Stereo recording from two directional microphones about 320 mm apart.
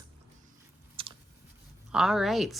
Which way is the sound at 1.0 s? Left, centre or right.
Centre.